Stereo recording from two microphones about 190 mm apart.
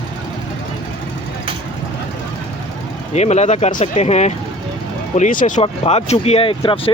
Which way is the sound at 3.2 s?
35° left (ahead or behind).